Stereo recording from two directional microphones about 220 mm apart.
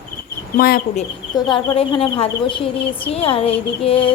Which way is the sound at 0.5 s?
45° left (ahead or behind).